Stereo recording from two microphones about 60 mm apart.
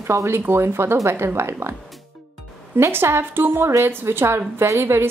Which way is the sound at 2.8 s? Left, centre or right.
Right.